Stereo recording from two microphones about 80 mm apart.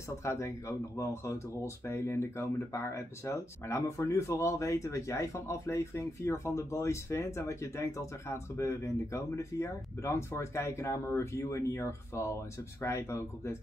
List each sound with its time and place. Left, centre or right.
0.2 s speech: left